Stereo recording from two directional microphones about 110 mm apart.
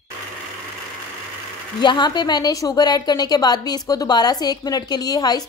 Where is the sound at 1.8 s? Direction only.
45° left (ahead or behind).